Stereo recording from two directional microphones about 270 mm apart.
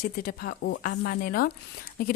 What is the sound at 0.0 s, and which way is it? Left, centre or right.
Speech, left.